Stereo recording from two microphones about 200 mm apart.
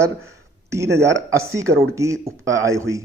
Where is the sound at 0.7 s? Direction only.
15° right (ahead or behind).